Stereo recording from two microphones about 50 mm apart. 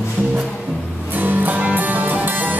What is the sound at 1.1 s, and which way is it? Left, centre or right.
Music, right.